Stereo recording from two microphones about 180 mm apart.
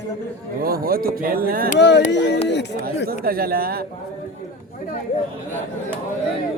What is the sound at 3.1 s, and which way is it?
Speech, 55° right (ahead or behind).